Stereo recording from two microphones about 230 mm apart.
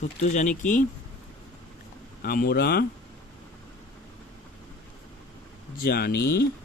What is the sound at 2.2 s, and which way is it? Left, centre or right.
Speech, left.